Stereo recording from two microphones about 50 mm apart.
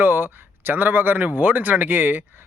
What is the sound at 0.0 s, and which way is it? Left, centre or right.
Speech, right.